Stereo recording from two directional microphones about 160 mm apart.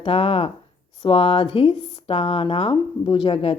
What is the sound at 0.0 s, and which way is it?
Speech, 40° left (ahead or behind).